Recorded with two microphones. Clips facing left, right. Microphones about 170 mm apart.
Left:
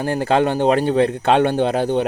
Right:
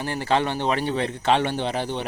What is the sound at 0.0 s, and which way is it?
Speech, 45° left (ahead or behind).